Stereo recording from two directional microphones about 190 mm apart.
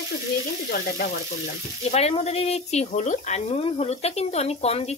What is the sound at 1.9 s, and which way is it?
Speech, 35° left (ahead or behind).